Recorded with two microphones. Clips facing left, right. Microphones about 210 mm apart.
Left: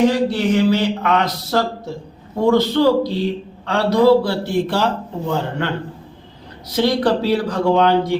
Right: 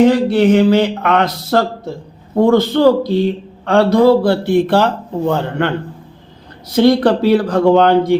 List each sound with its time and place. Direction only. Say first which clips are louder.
0.1 s a man's voice: right 6 dB; 55° right (ahead or behind)
6.8 s a man's voice: right 6 dB; 55° right (ahead or behind)